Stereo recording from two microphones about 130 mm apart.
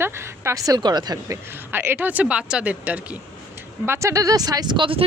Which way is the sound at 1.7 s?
15° right (ahead or behind).